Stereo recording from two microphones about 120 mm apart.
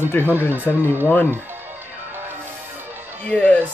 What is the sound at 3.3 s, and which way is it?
Speech, 10° left (ahead or behind).